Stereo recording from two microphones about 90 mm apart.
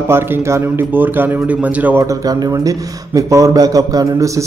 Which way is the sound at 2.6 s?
40° right (ahead or behind).